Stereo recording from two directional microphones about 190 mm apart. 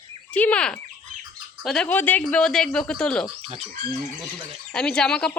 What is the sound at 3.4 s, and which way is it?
Speech, 30° right (ahead or behind).